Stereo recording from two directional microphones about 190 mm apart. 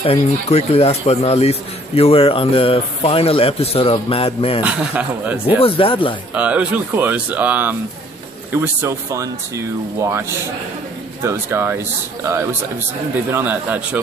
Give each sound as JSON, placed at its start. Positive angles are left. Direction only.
{"t": 0.0, "sound": "speech", "side_deg": 30}
{"t": 4.6, "sound": "speech", "side_deg": -10}
{"t": 5.6, "sound": "speech", "side_deg": 30}
{"t": 6.3, "sound": "speech", "side_deg": -5}
{"t": 11.2, "sound": "speech", "side_deg": -10}